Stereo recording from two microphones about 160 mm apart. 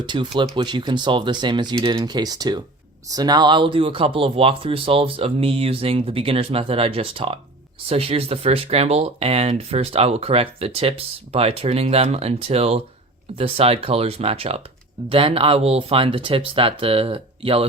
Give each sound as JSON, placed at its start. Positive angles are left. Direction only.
{"t": 0.0, "sound": "speech", "side_deg": -30}